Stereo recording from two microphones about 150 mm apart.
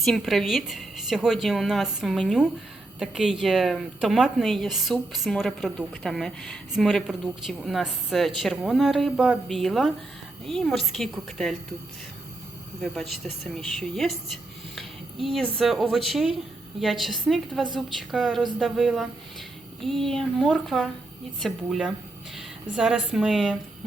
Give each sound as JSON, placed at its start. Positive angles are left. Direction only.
{"t": 0.0, "sound": "a woman's voice", "side_deg": 0}
{"t": 12.8, "sound": "a woman's voice", "side_deg": 0}
{"t": 14.8, "sound": "a sound", "side_deg": 0}
{"t": 15.5, "sound": "a woman's voice", "side_deg": 0}